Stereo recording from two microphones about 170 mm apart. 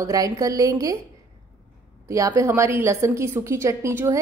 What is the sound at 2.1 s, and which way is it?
A woman's voice, 20° right (ahead or behind).